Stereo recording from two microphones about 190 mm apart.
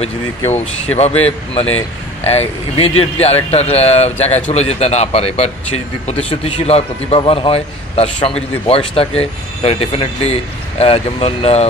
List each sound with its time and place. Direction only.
0.9 s speech: 35° left (ahead or behind)